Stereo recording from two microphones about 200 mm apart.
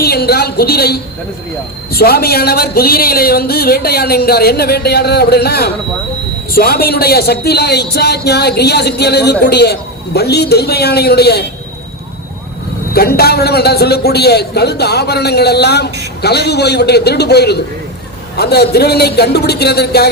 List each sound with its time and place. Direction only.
0.0 s a woman's voice: 50° left (ahead or behind)
12.9 s a man's voice: 50° left (ahead or behind)